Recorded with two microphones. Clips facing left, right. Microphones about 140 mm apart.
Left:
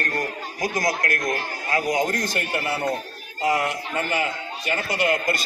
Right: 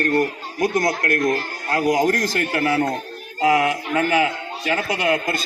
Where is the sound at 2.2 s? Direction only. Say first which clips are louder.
Right 5 dB; 90° right.